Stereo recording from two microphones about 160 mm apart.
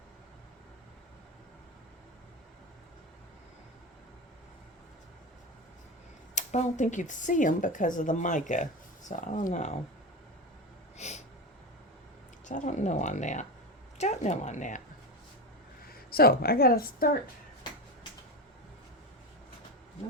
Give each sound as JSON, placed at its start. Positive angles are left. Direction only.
{"t": 6.3, "sound": "speech", "side_deg": 50}
{"t": 10.9, "sound": "a sound", "side_deg": 45}
{"t": 12.5, "sound": "speech", "side_deg": 50}
{"t": 15.9, "sound": "speech", "side_deg": 70}